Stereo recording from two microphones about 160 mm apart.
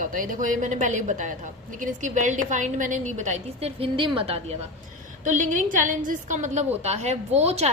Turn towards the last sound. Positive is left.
turn(degrees=-40)  # may be behind; listen again after turning